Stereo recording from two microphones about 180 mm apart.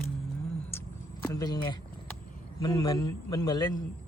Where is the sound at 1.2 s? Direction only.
20° left (ahead or behind).